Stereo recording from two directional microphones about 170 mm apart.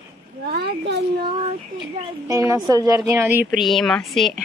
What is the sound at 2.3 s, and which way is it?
A woman's voice, 20° right (ahead or behind).